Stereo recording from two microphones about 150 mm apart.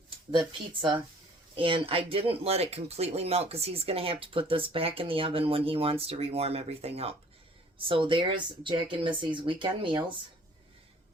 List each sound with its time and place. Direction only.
0.3 s speech: 30° right (ahead or behind)